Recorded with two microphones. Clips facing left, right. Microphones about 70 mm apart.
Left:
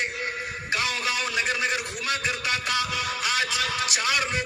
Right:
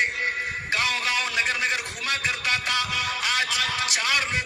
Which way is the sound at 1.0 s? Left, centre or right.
Left.